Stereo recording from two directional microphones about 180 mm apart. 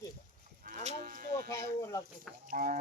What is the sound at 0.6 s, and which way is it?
Livestock, 50° right (ahead or behind).